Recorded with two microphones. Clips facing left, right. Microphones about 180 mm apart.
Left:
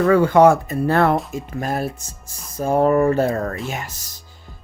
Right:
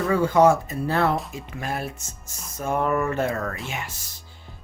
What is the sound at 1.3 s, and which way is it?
Speech, 45° left (ahead or behind).